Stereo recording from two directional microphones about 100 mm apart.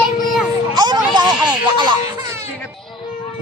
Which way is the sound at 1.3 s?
10° right (ahead or behind).